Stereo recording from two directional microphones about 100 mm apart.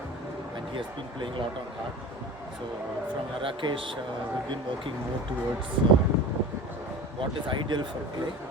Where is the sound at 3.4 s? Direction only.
60° right (ahead or behind).